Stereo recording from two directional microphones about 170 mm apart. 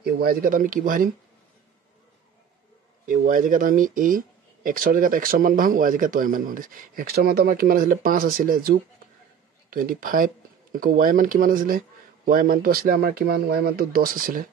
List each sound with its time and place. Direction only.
0.0 s speech: 60° right (ahead or behind)
3.1 s a man's voice: 55° right (ahead or behind)